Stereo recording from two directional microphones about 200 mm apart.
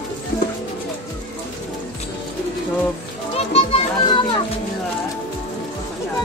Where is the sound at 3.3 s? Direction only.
30° left (ahead or behind).